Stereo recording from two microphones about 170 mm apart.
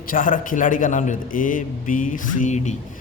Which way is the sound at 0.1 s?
50° left (ahead or behind).